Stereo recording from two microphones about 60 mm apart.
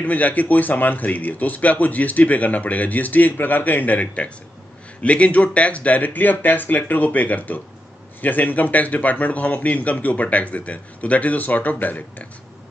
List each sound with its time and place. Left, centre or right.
0.0 s speech: left